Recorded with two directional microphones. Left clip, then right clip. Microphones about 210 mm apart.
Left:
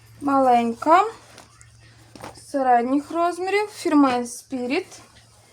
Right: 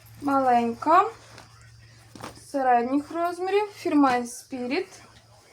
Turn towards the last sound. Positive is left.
turn(degrees=50)  # may be behind; listen again after turning